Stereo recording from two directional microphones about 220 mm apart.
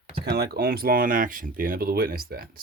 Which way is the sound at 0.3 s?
45° right (ahead or behind).